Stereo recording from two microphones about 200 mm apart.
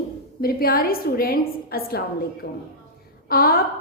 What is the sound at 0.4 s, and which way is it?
A woman's voice, 45° left (ahead or behind).